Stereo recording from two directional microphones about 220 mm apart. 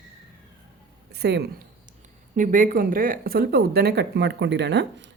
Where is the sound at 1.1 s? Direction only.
45° right (ahead or behind).